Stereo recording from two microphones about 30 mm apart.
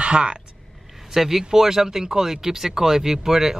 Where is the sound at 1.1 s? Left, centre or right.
Centre.